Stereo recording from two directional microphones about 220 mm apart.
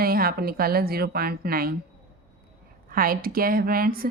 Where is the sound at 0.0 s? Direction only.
40° right (ahead or behind).